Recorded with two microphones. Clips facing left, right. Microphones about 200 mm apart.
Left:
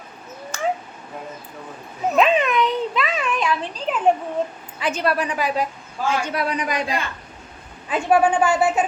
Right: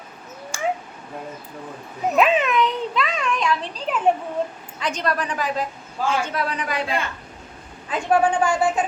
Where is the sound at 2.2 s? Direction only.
Centre (ahead or behind).